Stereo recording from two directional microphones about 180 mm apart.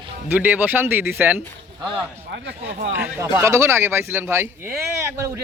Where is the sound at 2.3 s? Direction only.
80° right.